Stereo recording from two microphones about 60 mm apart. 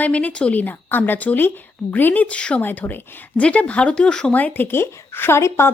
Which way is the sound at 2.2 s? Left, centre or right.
Centre.